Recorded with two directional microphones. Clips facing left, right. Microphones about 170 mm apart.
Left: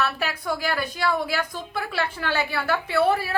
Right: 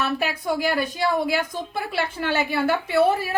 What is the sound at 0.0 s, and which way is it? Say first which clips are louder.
A woman's voice: right 2 dB; 20° right (ahead or behind).